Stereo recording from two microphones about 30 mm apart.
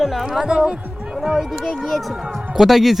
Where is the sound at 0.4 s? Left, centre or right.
Right.